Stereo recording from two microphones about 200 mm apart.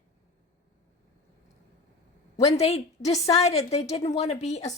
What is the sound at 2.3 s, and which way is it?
A woman's voice, 30° left (ahead or behind).